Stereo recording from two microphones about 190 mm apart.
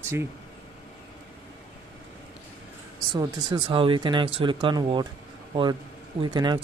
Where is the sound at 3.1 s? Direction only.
25° right (ahead or behind).